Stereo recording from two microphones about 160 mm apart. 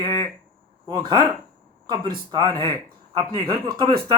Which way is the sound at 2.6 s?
30° right (ahead or behind).